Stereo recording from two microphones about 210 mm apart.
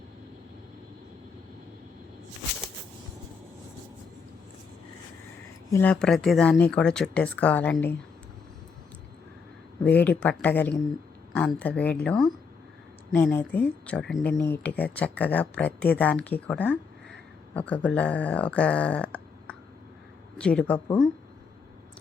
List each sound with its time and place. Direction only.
5.7 s speech: 5° left (ahead or behind)
10.0 s speech: 5° left (ahead or behind)
20.7 s speech: 20° left (ahead or behind)